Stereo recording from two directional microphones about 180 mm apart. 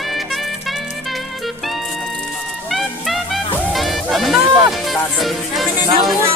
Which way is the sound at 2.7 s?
Centre (ahead or behind).